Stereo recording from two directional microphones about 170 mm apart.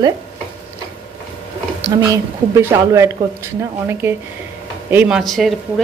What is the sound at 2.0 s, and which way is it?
A woman's voice, 20° right (ahead or behind).